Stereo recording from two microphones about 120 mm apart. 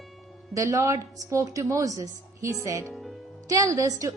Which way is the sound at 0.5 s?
25° right (ahead or behind).